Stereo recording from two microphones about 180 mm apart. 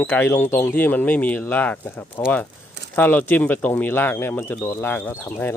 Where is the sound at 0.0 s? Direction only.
10° left (ahead or behind).